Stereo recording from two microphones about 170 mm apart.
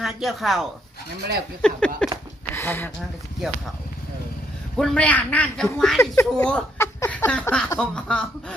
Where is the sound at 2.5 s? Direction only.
10° left (ahead or behind).